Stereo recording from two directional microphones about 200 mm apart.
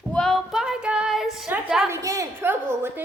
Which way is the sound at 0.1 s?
5° left (ahead or behind).